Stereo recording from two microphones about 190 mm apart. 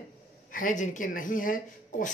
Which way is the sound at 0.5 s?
45° left (ahead or behind).